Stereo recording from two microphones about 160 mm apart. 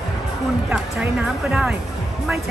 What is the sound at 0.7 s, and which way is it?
Speech, 5° right (ahead or behind).